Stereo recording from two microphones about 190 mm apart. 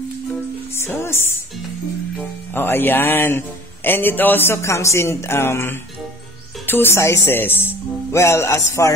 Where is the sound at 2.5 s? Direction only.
10° left (ahead or behind).